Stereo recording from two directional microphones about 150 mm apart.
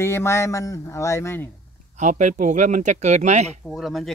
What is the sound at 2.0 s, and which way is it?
Speech, 55° right (ahead or behind).